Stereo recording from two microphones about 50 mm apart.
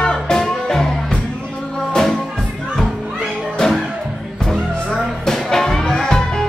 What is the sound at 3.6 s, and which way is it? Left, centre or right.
Music, centre.